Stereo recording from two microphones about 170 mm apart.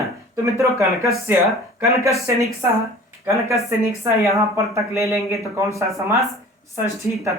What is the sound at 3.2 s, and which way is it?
Speech, 15° right (ahead or behind).